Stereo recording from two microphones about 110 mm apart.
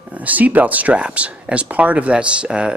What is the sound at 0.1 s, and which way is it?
Speech, 15° right (ahead or behind).